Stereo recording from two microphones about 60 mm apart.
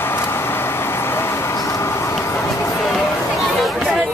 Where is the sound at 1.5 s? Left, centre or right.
Left.